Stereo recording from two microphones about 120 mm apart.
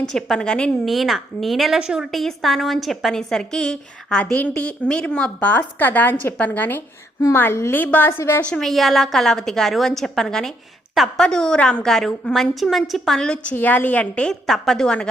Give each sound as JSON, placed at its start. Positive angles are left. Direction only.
{"t": 0.1, "sound": "a woman's voice", "side_deg": 5}
{"t": 8.4, "sound": "a woman's voice", "side_deg": 5}